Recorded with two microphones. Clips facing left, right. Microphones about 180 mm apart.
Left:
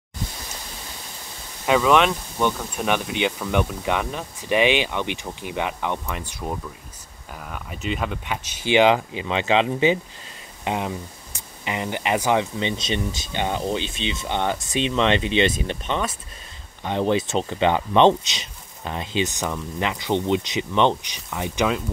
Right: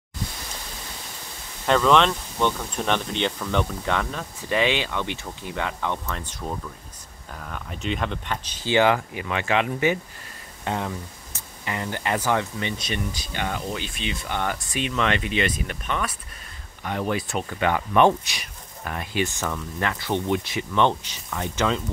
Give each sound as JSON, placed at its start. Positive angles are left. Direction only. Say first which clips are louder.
{"t": 1.7, "sound": "speech", "louder": "left 1 dB", "side_deg": 10}